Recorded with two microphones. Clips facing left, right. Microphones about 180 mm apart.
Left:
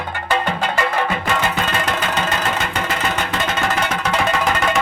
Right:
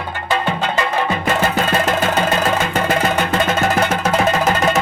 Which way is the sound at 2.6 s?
50° right (ahead or behind).